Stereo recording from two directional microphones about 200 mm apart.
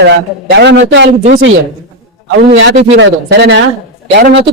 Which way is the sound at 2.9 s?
60° right (ahead or behind).